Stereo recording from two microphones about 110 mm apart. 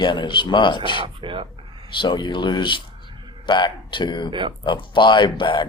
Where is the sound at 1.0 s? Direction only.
50° right (ahead or behind).